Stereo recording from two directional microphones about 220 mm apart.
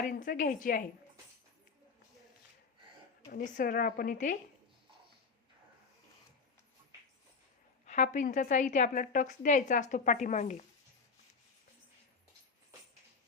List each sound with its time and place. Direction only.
0.1 s a woman's voice: 35° left (ahead or behind)
3.6 s a woman's voice: 40° left (ahead or behind)
7.9 s a woman's voice: 30° left (ahead or behind)